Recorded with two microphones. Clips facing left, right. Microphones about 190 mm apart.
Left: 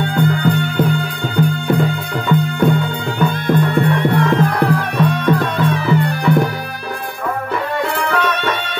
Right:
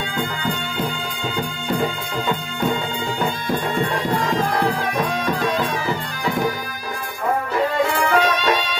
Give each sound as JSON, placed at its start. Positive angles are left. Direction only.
{"t": 0.0, "sound": "music", "side_deg": 60}
{"t": 7.9, "sound": "music", "side_deg": 65}